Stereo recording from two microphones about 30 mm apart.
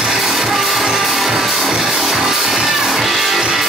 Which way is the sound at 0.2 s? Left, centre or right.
Centre.